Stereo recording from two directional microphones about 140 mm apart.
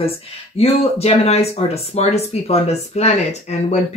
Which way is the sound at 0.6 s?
45° left (ahead or behind).